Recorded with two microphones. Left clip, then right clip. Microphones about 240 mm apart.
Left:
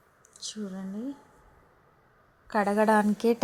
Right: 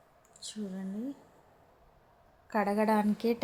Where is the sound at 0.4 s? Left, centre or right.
Centre.